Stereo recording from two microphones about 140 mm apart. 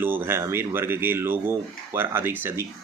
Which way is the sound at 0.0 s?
15° right (ahead or behind).